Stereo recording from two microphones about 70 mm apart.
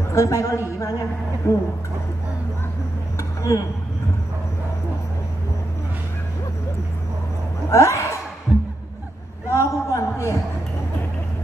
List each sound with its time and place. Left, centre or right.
0.1 s a woman's voice: left
3.2 s a sound: left
7.7 s speech: left
8.5 s music: centre
9.6 s a man's voice: left